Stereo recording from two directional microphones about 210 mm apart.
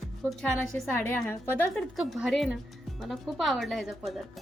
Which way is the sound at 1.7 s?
Centre (ahead or behind).